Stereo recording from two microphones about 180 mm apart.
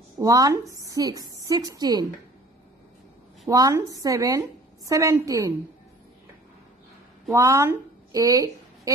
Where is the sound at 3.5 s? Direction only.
20° right (ahead or behind).